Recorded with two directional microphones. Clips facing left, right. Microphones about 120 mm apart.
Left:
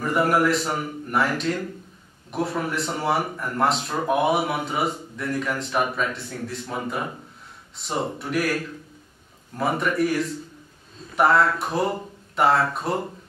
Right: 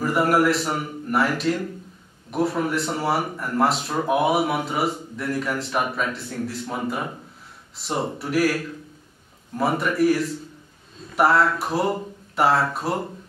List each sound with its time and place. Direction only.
0.0 s speech: centre (ahead or behind)
9.6 s speech: centre (ahead or behind)